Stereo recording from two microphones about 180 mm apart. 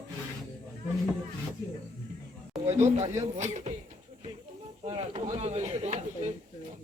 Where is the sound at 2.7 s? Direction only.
40° right (ahead or behind).